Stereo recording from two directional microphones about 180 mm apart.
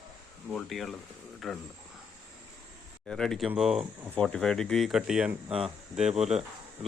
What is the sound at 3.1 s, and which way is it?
Speech, 5° left (ahead or behind).